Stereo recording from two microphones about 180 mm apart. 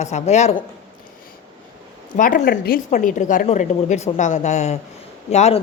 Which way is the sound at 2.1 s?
45° left (ahead or behind).